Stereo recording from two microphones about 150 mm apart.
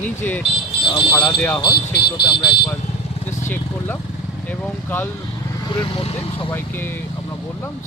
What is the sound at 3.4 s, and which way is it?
Vehicle, 15° left (ahead or behind).